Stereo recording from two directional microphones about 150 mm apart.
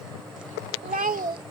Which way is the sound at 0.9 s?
70° right (ahead or behind).